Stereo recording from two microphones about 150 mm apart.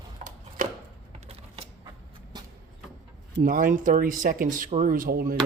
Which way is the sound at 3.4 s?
65° right (ahead or behind).